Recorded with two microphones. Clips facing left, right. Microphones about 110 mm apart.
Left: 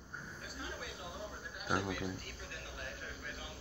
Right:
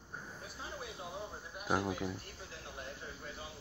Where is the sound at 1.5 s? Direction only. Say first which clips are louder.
Right 2 dB; 25° right (ahead or behind).